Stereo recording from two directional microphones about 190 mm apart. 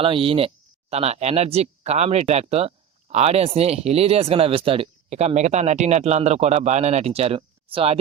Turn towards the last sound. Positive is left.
turn(degrees=-30)  # may be behind; listen again after turning